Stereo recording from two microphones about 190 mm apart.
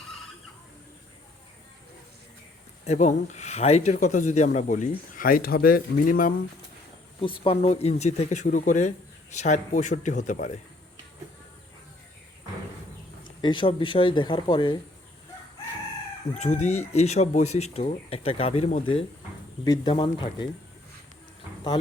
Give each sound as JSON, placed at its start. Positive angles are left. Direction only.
{"t": 2.8, "sound": "speech", "side_deg": 35}
{"t": 7.2, "sound": "speech", "side_deg": 30}
{"t": 13.4, "sound": "speech", "side_deg": 25}
{"t": 16.4, "sound": "speech", "side_deg": 35}